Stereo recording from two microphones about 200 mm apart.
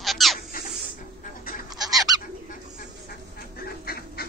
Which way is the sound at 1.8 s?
20° right (ahead or behind).